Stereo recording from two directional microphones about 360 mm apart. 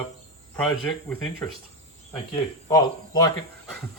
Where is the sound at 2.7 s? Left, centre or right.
Centre.